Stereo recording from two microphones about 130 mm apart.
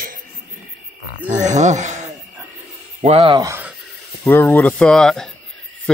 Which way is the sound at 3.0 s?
50° right (ahead or behind).